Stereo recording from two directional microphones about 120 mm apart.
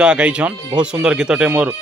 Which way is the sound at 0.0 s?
10° right (ahead or behind).